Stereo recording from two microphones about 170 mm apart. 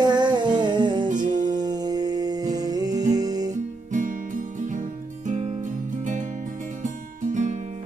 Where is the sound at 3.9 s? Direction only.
50° right (ahead or behind).